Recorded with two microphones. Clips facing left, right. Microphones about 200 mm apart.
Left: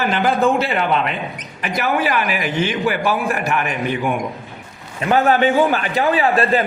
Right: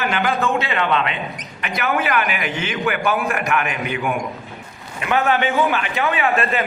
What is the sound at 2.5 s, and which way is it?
A man's voice, 35° left (ahead or behind).